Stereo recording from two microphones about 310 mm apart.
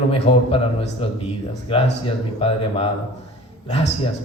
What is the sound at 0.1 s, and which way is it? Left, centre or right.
A man's voice, centre.